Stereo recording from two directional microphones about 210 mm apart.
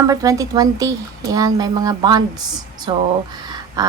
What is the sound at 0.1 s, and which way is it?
A woman's voice, 15° right (ahead or behind).